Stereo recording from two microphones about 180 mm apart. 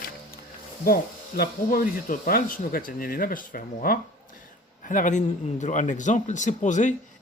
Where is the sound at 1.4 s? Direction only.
55° left (ahead or behind).